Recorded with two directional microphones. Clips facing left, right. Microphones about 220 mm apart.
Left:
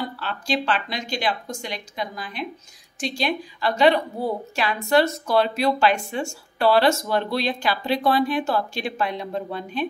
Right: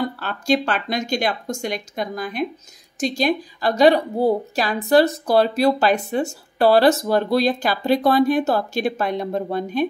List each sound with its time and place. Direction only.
0.2 s a woman's voice: 45° right (ahead or behind)